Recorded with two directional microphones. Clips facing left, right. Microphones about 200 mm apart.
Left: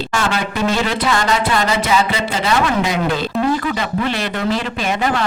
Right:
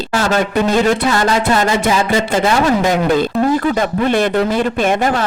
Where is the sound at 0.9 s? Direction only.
45° right (ahead or behind).